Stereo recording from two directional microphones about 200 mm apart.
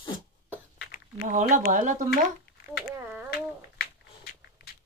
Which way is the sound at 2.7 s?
10° right (ahead or behind).